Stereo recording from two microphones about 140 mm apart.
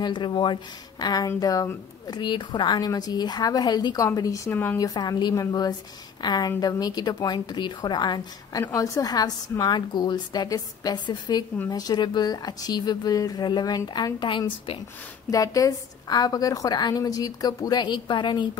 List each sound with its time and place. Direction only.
0.0 s speech: 35° left (ahead or behind); by 4.7 s 15° left (ahead or behind)
4.7 s speech: 30° left (ahead or behind)
15.3 s speech: 25° left (ahead or behind)